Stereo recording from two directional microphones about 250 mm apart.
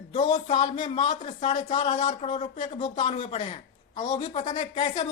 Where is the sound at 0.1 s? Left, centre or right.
Centre.